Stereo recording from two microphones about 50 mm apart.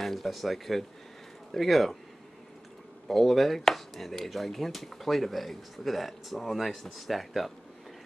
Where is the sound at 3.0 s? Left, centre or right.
Centre.